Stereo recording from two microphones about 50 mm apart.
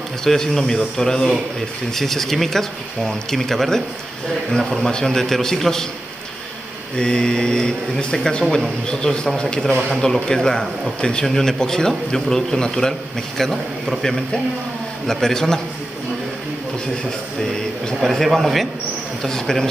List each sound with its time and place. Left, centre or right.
0.2 s speech: centre
4.8 s speech: centre
7.0 s speech: centre
9.8 s speech: centre
10.6 s speech: left
11.2 s speech: centre
12.6 s speech: left
13.4 s speech: centre
18.0 s speech: centre